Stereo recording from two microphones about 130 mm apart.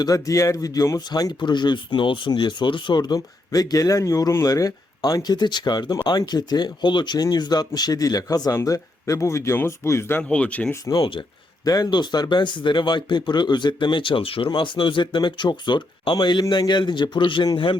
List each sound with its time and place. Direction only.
0.0 s speech: 25° left (ahead or behind); by 10.8 s 10° left (ahead or behind)
10.8 s speech: 30° left (ahead or behind)